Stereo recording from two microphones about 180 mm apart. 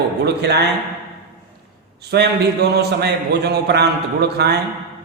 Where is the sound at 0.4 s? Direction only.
70° right (ahead or behind).